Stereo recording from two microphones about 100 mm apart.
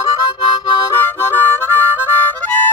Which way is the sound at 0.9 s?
25° left (ahead or behind).